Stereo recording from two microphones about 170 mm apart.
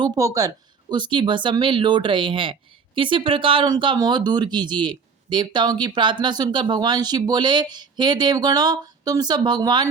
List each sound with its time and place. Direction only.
0.0 s speech: 20° right (ahead or behind)